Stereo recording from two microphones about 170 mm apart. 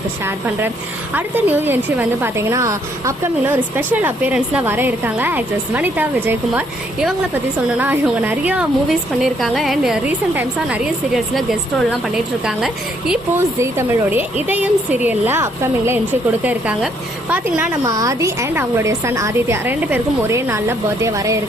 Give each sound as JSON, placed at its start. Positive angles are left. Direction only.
{"t": 1.1, "sound": "a woman's voice", "side_deg": -10}
{"t": 13.3, "sound": "a woman's voice", "side_deg": -15}
{"t": 17.8, "sound": "a woman's voice", "side_deg": -20}